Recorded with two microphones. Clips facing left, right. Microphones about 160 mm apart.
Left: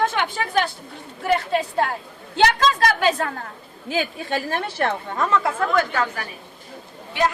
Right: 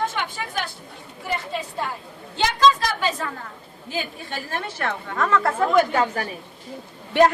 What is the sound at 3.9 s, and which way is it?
Speech, 85° left.